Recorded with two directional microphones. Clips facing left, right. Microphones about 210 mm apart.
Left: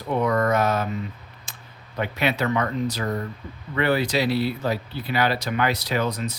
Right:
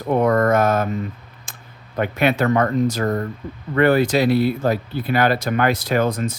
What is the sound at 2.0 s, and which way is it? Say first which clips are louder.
Speech: right 6 dB; 50° right (ahead or behind).